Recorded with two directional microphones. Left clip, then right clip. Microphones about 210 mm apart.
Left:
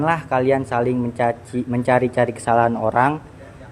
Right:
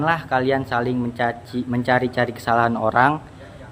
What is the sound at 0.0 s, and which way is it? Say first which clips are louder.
Speech: left 1 dB; 10° left (ahead or behind).